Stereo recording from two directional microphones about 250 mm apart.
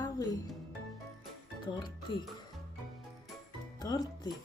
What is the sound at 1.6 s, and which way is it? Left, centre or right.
Speech, centre.